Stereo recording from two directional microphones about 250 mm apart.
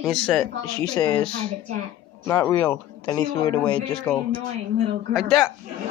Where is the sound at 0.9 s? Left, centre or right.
Centre.